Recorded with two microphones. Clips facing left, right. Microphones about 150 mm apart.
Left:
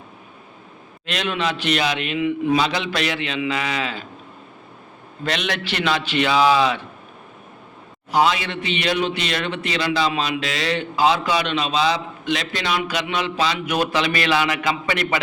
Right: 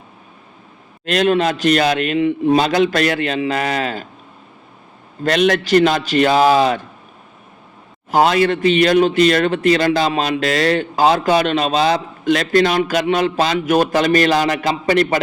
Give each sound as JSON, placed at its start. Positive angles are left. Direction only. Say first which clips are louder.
{"t": 1.0, "sound": "a man's voice", "louder": "right 9 dB", "side_deg": -45}
{"t": 5.2, "sound": "a man's voice", "louder": "right 10 dB", "side_deg": -45}
{"t": 8.1, "sound": "a man's voice", "louder": "right 6 dB", "side_deg": -45}